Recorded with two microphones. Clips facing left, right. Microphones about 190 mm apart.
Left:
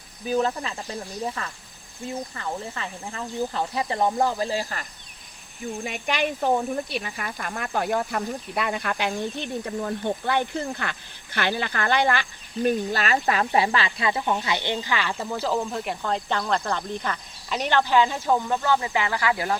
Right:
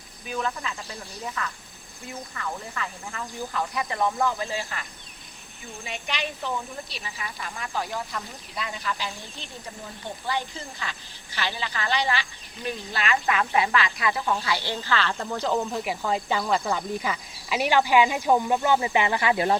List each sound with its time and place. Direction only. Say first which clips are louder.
0.3 s speech: left 6 dB; 35° left (ahead or behind)
5.8 s speech: left 5 dB; 50° left (ahead or behind); by 19.5 s 25° right (ahead or behind)